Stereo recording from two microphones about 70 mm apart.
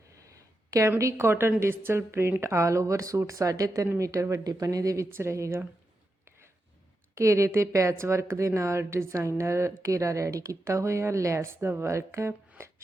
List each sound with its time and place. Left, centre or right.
0.2 s a woman's voice: right
5.1 s speech: right
7.2 s a woman's voice: right